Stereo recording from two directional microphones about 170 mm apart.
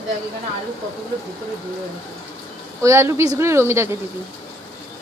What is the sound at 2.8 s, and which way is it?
A woman's voice, 15° right (ahead or behind).